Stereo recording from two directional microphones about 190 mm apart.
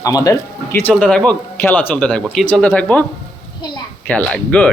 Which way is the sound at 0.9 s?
5° left (ahead or behind).